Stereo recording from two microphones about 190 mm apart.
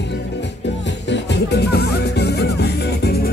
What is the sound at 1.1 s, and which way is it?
Music, 65° left (ahead or behind).